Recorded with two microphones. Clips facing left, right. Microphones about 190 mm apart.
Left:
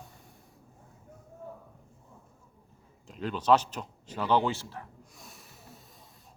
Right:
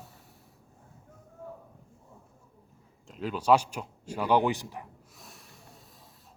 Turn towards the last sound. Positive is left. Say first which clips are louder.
# left 1 dB
turn(degrees=0)  # may be behind; listen again after turning